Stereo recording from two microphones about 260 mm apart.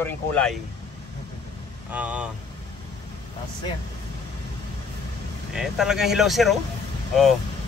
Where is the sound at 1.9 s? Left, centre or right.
Centre.